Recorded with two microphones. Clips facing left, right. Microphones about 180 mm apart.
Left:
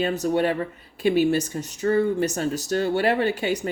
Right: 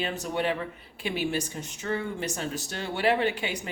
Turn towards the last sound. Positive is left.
turn(degrees=40)  # may be behind; listen again after turning